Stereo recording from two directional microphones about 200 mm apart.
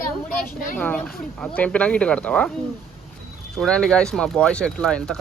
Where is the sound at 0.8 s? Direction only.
5° left (ahead or behind).